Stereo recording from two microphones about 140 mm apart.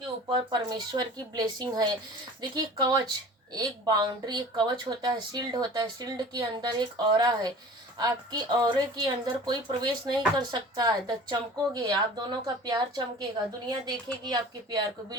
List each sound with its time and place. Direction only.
0.3 s a woman's voice: 30° right (ahead or behind)